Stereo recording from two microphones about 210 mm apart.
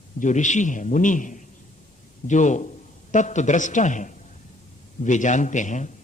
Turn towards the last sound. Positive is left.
turn(degrees=35)  # may be behind; listen again after turning